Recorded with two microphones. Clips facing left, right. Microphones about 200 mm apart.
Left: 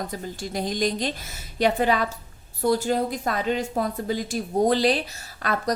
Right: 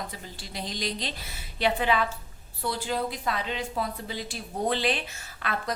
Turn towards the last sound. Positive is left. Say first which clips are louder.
# left 6 dB
turn(degrees=40)  # may be behind; listen again after turning